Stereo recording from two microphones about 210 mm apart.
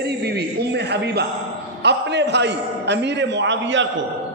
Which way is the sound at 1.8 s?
55° right (ahead or behind).